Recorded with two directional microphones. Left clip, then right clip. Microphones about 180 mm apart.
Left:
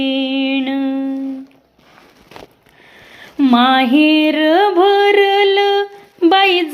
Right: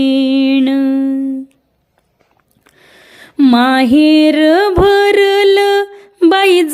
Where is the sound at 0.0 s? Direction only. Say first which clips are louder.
Right 5 dB; 50° right (ahead or behind).